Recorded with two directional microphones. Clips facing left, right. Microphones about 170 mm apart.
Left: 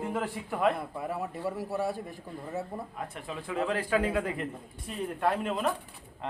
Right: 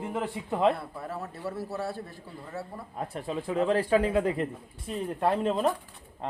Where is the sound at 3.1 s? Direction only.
35° right (ahead or behind).